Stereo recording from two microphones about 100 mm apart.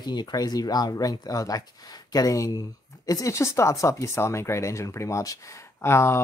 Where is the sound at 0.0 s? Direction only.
45° left (ahead or behind).